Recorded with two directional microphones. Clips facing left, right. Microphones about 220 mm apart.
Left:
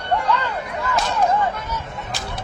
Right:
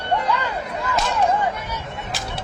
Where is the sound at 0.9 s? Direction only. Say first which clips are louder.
Left 1 dB; 10° right (ahead or behind).